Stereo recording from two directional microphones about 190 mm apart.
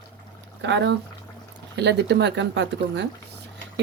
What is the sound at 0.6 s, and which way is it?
Speech, 70° right (ahead or behind).